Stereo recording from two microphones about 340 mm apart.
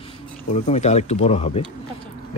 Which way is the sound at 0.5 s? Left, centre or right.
Centre.